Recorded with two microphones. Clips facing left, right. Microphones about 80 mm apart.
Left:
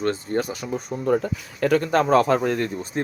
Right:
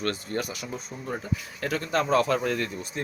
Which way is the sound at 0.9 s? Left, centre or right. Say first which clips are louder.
Left 16 dB; left.